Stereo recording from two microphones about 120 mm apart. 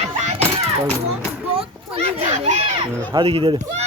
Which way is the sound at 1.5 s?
55° right (ahead or behind).